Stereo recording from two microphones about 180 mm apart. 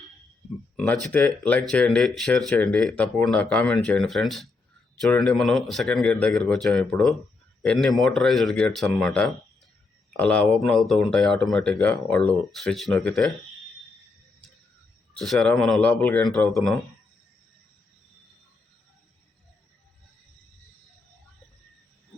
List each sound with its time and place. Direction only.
0.8 s speech: 5° left (ahead or behind)
15.2 s speech: centre (ahead or behind)